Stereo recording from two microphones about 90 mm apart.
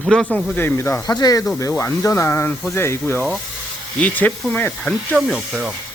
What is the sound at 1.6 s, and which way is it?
Speech, 35° left (ahead or behind).